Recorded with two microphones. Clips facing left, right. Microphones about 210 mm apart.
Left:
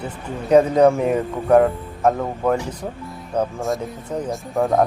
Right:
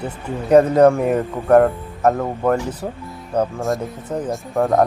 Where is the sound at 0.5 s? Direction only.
Centre (ahead or behind).